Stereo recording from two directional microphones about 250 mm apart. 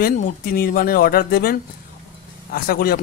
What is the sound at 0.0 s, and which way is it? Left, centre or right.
Speech, left.